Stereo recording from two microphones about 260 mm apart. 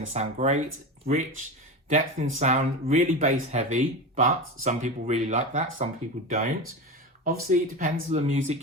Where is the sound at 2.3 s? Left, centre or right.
Right.